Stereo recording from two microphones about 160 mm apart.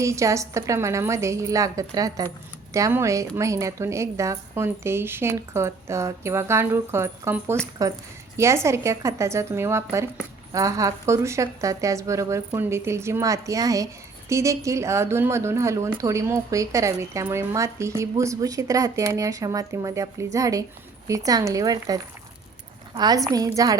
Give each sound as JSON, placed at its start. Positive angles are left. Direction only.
{"t": 0.0, "sound": "a woman's voice", "side_deg": -20}